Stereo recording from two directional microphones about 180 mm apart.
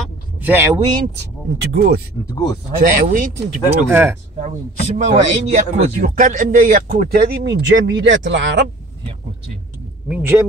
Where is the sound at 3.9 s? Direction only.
15° right (ahead or behind).